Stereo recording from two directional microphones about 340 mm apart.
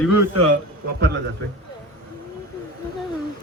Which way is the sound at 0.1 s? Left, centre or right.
Right.